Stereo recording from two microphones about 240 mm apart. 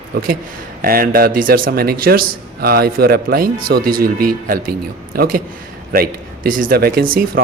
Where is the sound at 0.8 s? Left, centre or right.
Right.